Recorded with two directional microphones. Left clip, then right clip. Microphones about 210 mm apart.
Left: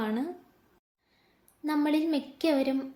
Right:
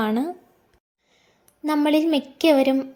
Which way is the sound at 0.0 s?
35° right (ahead or behind).